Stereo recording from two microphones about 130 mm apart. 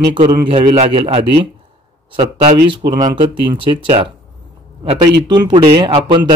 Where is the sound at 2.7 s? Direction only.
35° right (ahead or behind).